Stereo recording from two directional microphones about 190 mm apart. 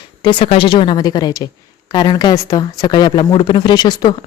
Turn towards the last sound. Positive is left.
turn(degrees=20)  # may be behind; listen again after turning